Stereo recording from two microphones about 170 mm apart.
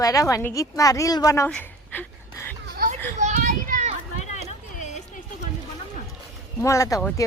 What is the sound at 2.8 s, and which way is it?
Children playing, 45° right (ahead or behind).